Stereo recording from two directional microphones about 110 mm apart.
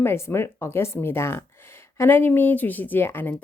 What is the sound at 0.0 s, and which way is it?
Speech, 20° left (ahead or behind).